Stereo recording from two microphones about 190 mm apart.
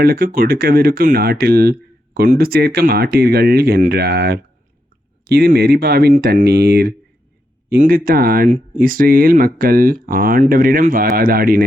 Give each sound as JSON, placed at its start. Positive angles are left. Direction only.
{"t": 0.0, "sound": "speech", "side_deg": -50}